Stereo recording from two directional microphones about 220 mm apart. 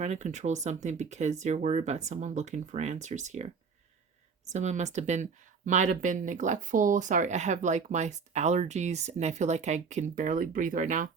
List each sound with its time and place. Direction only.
0.0 s speech: 30° right (ahead or behind)
4.5 s speech: 30° right (ahead or behind)